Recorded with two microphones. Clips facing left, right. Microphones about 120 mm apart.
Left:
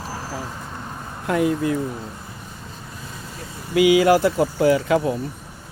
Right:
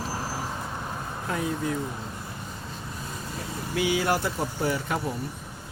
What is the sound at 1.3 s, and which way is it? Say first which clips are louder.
Speech: left 9 dB; 75° left (ahead or behind).